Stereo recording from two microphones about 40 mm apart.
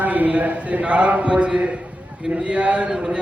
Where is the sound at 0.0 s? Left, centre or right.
Right.